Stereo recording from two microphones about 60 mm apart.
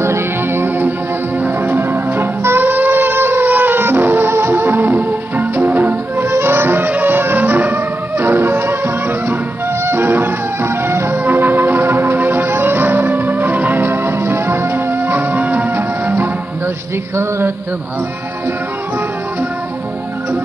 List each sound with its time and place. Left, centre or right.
0.0 s music: right